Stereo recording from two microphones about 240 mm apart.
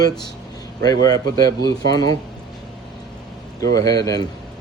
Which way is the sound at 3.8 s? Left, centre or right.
Centre.